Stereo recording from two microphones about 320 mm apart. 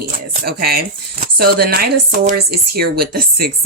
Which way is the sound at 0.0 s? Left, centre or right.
Right.